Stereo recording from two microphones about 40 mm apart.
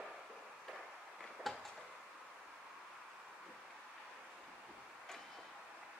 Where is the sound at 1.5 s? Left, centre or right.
Centre.